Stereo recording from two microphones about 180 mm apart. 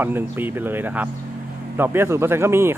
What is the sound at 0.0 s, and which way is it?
Speech, 10° right (ahead or behind).